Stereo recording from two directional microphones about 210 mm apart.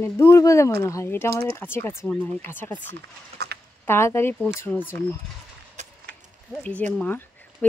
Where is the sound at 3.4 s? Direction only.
50° right (ahead or behind).